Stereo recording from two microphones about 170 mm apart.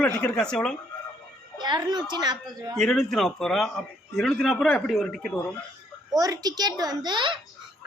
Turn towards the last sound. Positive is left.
turn(degrees=-30)  # may be behind; listen again after turning